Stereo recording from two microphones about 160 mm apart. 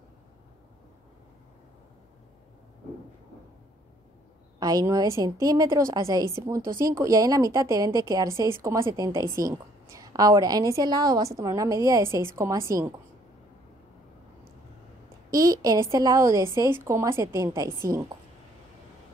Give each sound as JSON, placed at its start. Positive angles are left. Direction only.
{"t": 4.6, "sound": "a woman's voice", "side_deg": -25}
{"t": 15.3, "sound": "a woman's voice", "side_deg": -20}